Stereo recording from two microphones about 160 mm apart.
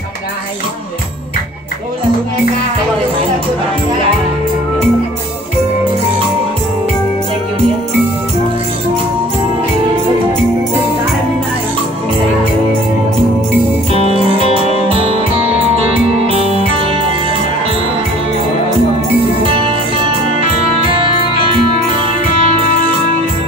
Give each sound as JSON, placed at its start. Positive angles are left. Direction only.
{"t": 14.1, "sound": "music", "side_deg": -35}
{"t": 20.3, "sound": "music", "side_deg": -35}